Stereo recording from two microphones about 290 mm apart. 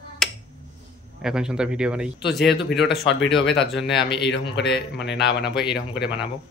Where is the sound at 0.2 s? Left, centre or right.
Centre.